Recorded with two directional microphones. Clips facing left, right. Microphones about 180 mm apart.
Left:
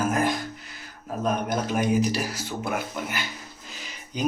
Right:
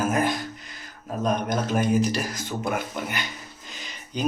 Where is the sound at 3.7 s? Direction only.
10° left (ahead or behind).